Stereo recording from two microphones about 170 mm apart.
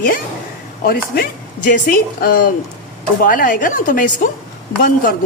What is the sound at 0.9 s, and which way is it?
Speech, 60° left (ahead or behind).